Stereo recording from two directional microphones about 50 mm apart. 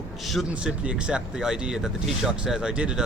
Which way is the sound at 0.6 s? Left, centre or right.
Right.